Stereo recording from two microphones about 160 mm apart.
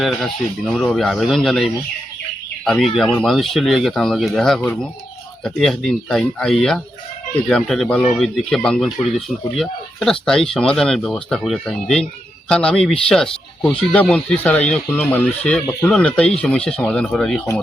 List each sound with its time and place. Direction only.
0.0 s speech: centre (ahead or behind)
2.6 s speech: centre (ahead or behind)